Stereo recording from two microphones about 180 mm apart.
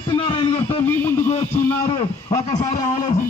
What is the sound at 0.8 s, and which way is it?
A man's voice, 15° left (ahead or behind).